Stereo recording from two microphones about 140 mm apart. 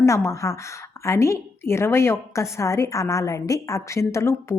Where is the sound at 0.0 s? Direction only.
20° left (ahead or behind).